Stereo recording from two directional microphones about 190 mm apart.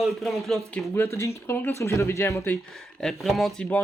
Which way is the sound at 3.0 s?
Centre (ahead or behind).